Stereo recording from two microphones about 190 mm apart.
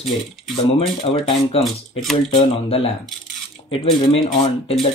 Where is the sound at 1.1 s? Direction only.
30° left (ahead or behind).